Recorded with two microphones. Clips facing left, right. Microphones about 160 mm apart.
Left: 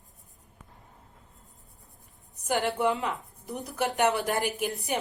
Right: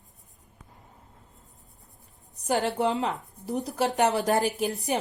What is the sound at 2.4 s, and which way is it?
A woman's voice, 35° right (ahead or behind).